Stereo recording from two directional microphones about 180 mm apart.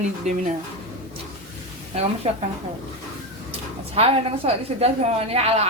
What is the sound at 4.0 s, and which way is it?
A woman's voice, 35° right (ahead or behind).